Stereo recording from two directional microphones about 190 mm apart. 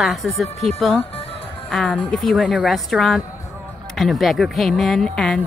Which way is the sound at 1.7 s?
5° left (ahead or behind).